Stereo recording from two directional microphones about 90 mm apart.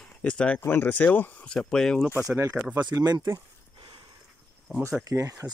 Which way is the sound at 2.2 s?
35° right (ahead or behind).